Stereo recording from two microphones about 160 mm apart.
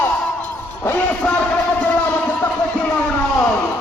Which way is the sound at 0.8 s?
10° left (ahead or behind).